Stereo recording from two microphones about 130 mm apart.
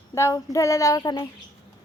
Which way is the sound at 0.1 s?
20° left (ahead or behind).